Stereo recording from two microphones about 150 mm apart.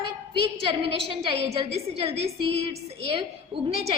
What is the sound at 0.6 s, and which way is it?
A woman's voice, 35° right (ahead or behind).